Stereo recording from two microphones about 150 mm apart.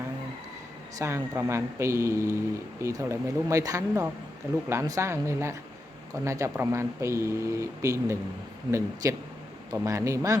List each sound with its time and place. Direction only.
0.9 s speech: 20° right (ahead or behind)